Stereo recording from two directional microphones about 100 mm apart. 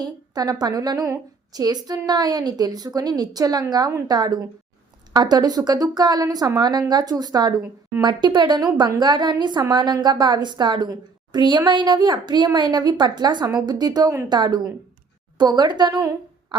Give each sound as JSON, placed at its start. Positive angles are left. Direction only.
{"t": 0.0, "sound": "a woman's voice", "side_deg": -40}